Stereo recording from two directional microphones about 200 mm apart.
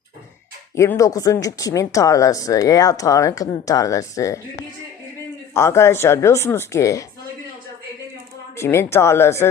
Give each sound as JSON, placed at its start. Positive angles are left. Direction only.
{"t": 0.8, "sound": "speech", "side_deg": 15}
{"t": 5.5, "sound": "speech", "side_deg": 15}
{"t": 8.5, "sound": "speech", "side_deg": 15}